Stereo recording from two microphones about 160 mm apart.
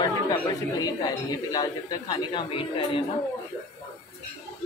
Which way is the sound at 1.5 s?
25° left (ahead or behind).